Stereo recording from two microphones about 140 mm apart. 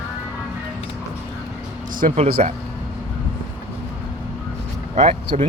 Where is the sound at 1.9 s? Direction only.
75° right (ahead or behind).